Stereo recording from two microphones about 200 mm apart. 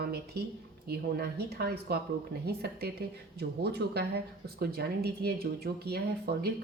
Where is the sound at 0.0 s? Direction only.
50° right (ahead or behind).